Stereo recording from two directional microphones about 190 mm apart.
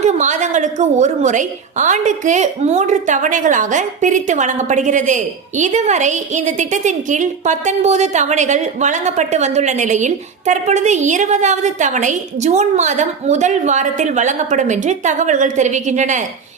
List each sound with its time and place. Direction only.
0.0 s a woman's voice: 40° right (ahead or behind)